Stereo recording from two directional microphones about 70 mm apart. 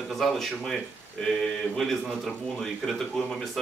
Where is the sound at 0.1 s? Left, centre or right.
Centre.